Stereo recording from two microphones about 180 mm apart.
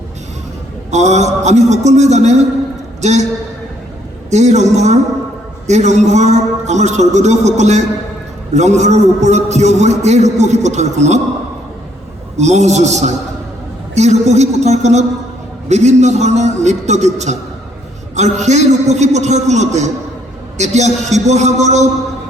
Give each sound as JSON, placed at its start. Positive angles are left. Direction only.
{"t": 0.9, "sound": "a man's voice", "side_deg": -40}
{"t": 4.3, "sound": "a man's voice", "side_deg": -40}
{"t": 12.4, "sound": "a man's voice", "side_deg": -40}